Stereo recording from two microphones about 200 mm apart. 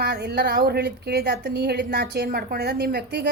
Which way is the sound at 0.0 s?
55° right (ahead or behind).